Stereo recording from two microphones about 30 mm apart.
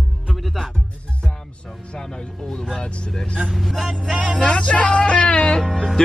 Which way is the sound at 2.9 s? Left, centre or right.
Left.